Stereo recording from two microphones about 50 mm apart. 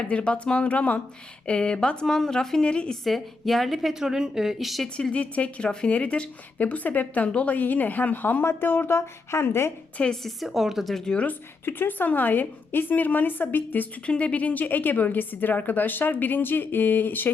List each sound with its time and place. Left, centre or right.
0.0 s a woman's voice: left
2.9 s a woman's voice: centre
4.0 s speech: centre
5.1 s speech: left
10.2 s a woman's voice: centre
11.6 s speech: left
14.1 s speech: left